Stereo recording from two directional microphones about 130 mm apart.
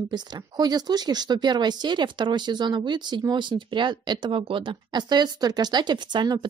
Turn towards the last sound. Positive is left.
turn(degrees=-35)  # may be behind; listen again after turning